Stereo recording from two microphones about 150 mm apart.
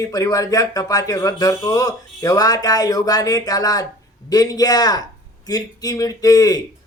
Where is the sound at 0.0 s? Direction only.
25° left (ahead or behind).